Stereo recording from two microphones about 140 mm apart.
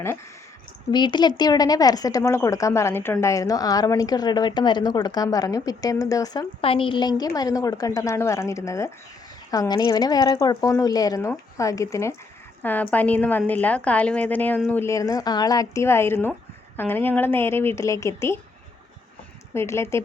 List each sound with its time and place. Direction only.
0.9 s a woman's voice: 30° left (ahead or behind)
6.6 s a woman's voice: 40° left (ahead or behind); by 18.3 s 20° left (ahead or behind)
19.5 s a woman's voice: 20° left (ahead or behind)